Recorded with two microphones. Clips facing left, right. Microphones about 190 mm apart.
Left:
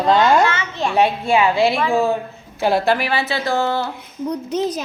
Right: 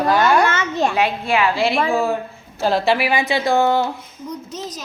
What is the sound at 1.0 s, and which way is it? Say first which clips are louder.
Speech: left 2 dB; 25° left (ahead or behind).